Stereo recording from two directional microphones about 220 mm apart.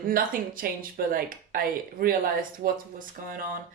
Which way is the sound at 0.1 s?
40° right (ahead or behind).